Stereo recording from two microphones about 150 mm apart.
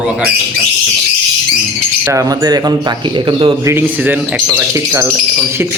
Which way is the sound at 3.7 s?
15° right (ahead or behind).